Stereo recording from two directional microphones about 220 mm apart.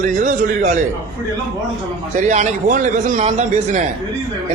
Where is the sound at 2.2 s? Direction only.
35° right (ahead or behind).